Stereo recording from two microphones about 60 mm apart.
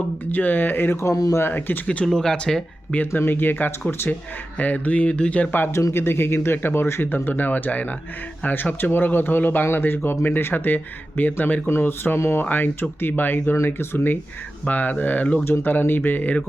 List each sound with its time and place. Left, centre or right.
0.3 s speech: left
0.9 s speech: left
1.4 s speech: left
2.0 s speech: centre
3.1 s speech: left
4.5 s speech: left
7.3 s speech: left
12.5 s speech: left
15.4 s speech: left